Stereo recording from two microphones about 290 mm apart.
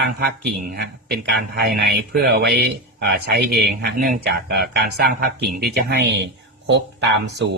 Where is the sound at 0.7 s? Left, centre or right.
Right.